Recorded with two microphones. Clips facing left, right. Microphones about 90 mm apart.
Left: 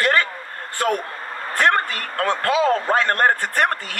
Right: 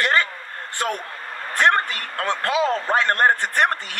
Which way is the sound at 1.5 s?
20° right (ahead or behind).